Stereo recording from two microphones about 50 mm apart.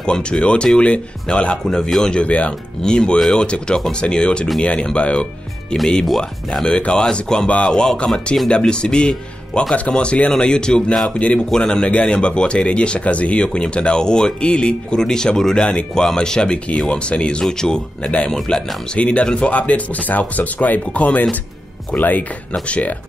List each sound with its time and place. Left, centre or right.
0.0 s speech: centre
1.6 s speech: centre
2.1 s speech: left
2.8 s speech: centre
6.0 s speech: centre; by 22.9 s left